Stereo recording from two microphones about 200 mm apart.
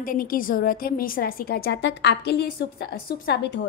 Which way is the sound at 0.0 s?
45° left (ahead or behind).